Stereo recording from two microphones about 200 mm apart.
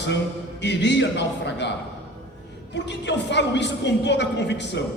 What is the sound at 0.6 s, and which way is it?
A woman's voice, 60° left (ahead or behind).